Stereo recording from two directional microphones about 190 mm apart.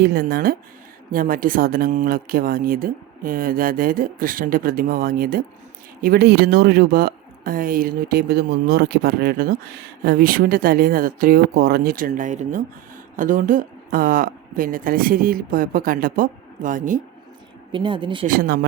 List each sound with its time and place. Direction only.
0.0 s speech: 55° right (ahead or behind)
17.7 s speech: 25° right (ahead or behind)
18.3 s speech: 50° right (ahead or behind)